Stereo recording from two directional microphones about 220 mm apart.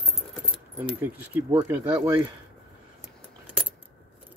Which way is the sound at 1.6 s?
10° right (ahead or behind).